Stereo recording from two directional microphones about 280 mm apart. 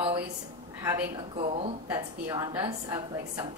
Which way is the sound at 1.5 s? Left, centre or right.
Right.